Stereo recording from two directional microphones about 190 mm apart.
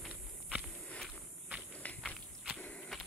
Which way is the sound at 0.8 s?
5° left (ahead or behind).